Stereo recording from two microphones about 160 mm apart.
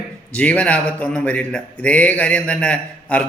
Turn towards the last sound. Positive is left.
turn(degrees=10)  # may be behind; listen again after turning